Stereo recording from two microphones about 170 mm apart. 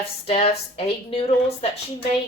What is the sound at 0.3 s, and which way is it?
Speech, 35° left (ahead or behind).